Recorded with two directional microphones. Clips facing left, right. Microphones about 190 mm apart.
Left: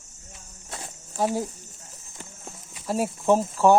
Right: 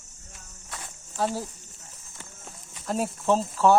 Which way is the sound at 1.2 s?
15° left (ahead or behind).